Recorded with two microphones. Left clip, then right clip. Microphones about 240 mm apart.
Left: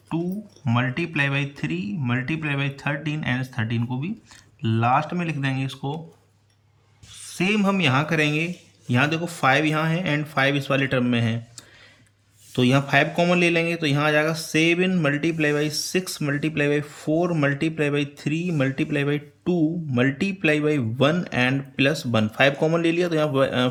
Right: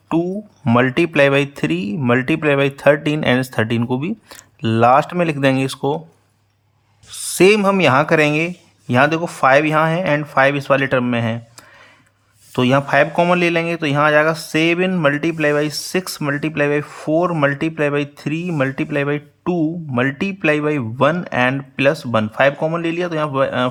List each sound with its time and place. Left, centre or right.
0.9 s speech: right
4.8 s speech: right
7.1 s speech: right